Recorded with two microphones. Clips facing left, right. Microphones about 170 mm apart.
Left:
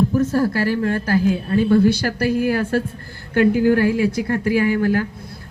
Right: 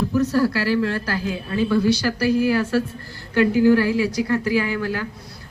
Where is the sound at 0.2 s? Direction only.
50° left (ahead or behind).